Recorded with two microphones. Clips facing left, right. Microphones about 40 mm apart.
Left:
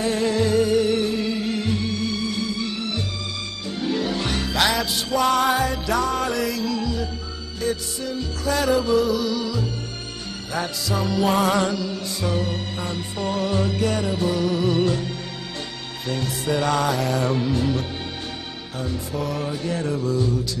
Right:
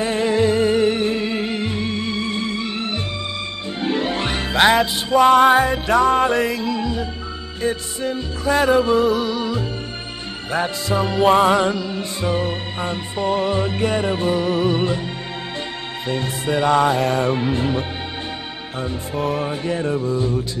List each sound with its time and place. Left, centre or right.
0.0 s music: right
16.1 s music: right